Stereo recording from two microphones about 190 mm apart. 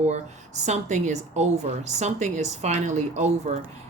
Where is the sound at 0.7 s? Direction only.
40° right (ahead or behind).